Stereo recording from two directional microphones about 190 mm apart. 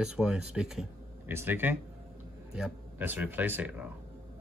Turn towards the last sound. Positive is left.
turn(degrees=-10)  # may be behind; listen again after turning